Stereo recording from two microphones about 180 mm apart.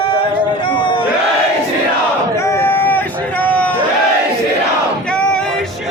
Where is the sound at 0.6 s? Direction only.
25° left (ahead or behind).